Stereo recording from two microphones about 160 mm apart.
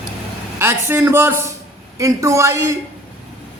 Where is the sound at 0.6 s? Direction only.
15° right (ahead or behind).